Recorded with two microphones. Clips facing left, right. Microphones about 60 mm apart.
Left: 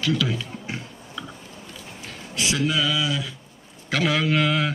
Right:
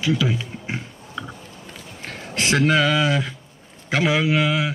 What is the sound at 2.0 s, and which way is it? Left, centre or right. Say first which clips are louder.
Speech: right 3 dB; right.